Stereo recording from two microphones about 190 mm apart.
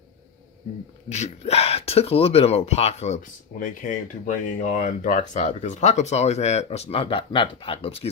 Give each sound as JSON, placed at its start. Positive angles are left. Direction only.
{"t": 1.1, "sound": "speech", "side_deg": 35}